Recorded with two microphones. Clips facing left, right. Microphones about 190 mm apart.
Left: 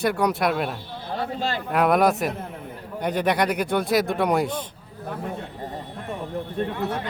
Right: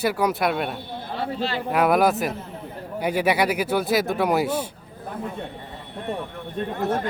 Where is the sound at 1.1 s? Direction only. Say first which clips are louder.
Even; 45° left (ahead or behind).